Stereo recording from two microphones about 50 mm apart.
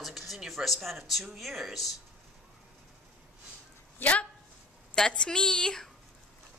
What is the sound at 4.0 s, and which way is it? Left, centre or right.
Speech, left.